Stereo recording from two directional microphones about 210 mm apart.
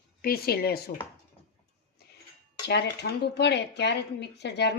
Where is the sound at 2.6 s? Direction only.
55° left (ahead or behind).